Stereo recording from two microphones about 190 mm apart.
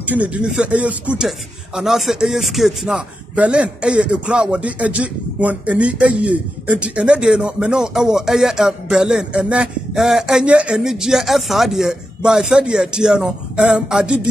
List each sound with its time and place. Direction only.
0.0 s speech: 10° right (ahead or behind)